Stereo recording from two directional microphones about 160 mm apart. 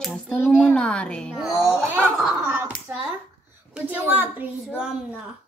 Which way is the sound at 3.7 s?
10° right (ahead or behind).